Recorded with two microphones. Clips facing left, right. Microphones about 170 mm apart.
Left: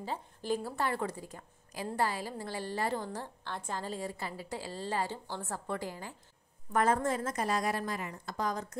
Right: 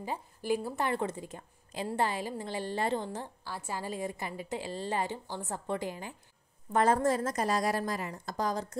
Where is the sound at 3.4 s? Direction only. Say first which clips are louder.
Even; 5° right (ahead or behind).